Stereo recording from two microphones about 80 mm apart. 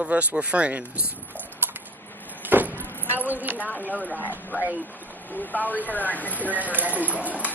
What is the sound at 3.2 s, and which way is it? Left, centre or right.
Speech, right.